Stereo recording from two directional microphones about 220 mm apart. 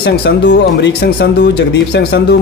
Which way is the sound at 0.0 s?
50° left (ahead or behind).